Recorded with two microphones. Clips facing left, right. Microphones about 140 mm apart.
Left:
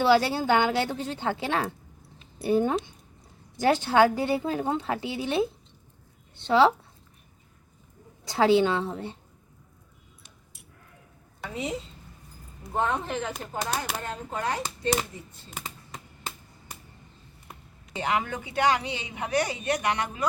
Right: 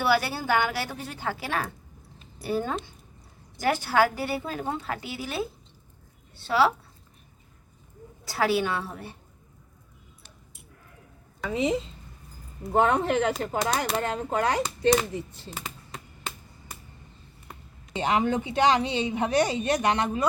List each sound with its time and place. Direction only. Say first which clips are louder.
0.0 s a woman's voice: left 4 dB; 20° left (ahead or behind)
8.3 s a woman's voice: left 4 dB; 20° left (ahead or behind)
11.5 s speech: right 7 dB; 90° right
12.7 s speech: right 6 dB; 75° right (ahead or behind)
17.9 s speech: right 4 dB; 25° right (ahead or behind)